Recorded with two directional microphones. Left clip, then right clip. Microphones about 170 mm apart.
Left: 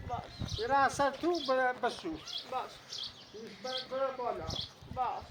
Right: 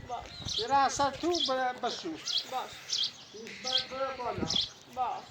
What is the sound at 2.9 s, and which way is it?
Bird, 65° left (ahead or behind).